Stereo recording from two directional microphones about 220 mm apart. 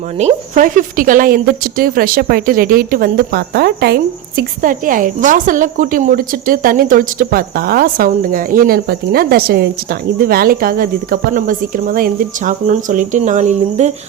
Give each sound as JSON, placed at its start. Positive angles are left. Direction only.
{"t": 0.2, "sound": "a woman's voice", "side_deg": -30}